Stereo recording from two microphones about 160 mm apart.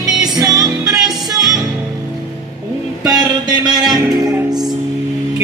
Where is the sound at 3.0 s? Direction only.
25° right (ahead or behind).